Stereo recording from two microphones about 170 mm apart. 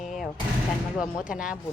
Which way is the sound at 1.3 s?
5° right (ahead or behind).